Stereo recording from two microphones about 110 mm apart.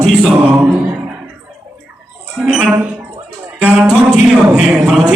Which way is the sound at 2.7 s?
15° right (ahead or behind).